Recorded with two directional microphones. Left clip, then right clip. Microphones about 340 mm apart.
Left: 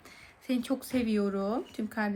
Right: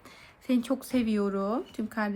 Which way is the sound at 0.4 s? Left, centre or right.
Centre.